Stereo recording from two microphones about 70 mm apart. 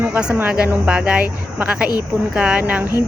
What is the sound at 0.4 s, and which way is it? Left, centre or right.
Speech, centre.